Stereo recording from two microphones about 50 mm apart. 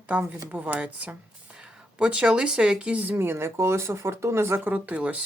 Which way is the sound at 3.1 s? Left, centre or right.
Right.